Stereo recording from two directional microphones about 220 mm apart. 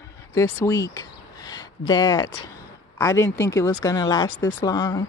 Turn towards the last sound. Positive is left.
turn(degrees=15)  # may be behind; listen again after turning